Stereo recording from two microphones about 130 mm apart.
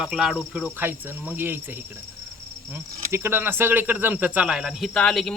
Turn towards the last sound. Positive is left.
turn(degrees=5)  # may be behind; listen again after turning